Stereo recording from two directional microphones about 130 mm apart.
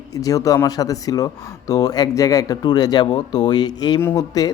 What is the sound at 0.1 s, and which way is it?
Speech, 25° left (ahead or behind).